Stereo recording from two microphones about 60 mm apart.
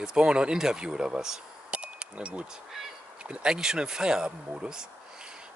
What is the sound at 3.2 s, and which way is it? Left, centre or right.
Speech, centre.